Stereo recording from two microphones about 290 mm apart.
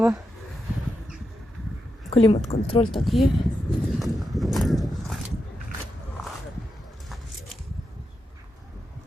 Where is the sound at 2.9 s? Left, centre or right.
Centre.